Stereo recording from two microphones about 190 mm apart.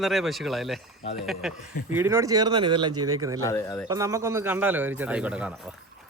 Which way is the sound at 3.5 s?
15° left (ahead or behind).